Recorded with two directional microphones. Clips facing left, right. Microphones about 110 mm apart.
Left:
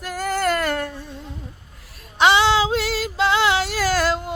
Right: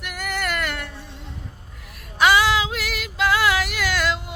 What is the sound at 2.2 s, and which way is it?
Female singing, 25° left (ahead or behind).